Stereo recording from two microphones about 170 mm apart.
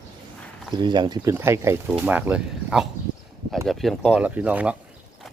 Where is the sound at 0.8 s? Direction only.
25° right (ahead or behind); by 4.8 s 10° right (ahead or behind).